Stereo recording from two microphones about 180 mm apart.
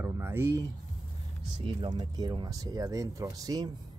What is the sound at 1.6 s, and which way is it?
Speech, 25° right (ahead or behind).